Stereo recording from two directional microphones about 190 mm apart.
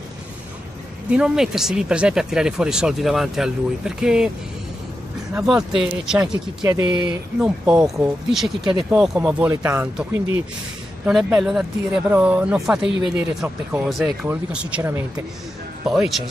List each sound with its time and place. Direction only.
1.1 s speech: 5° right (ahead or behind)
5.3 s speech: 5° right (ahead or behind)
6.7 s speech: 20° right (ahead or behind)
7.3 s speech: 5° right (ahead or behind)
11.1 s speech: 5° right (ahead or behind)
15.9 s speech: centre (ahead or behind)